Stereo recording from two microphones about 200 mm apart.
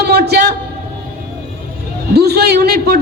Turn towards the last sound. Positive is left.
turn(degrees=-50)  # may be behind; listen again after turning